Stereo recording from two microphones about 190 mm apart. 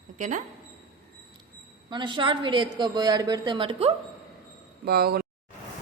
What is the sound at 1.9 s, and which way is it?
A woman's voice, 25° right (ahead or behind).